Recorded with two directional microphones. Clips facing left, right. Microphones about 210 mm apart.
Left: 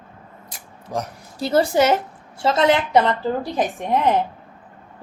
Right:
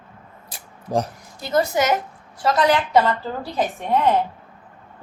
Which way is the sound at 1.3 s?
30° left (ahead or behind).